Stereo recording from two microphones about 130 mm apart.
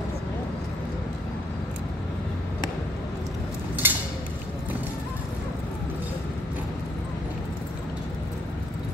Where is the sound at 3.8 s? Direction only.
15° right (ahead or behind).